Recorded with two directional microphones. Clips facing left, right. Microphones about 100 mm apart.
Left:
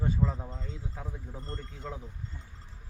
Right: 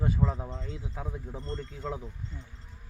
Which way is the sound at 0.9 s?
20° right (ahead or behind).